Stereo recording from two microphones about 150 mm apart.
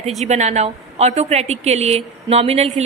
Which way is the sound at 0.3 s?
50° right (ahead or behind).